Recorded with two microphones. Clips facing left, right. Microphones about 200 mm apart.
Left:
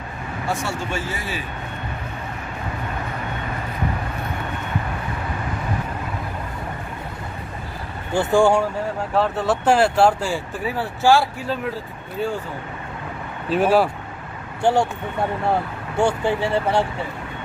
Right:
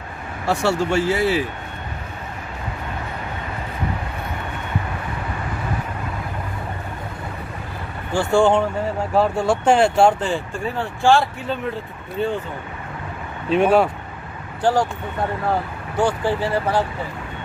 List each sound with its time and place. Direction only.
0.5 s speech: 70° right (ahead or behind)
8.2 s speech: 15° left (ahead or behind)
9.1 s speech: centre (ahead or behind)
13.5 s speech: 5° left (ahead or behind)
14.6 s speech: 25° left (ahead or behind)
16.0 s speech: 25° left (ahead or behind)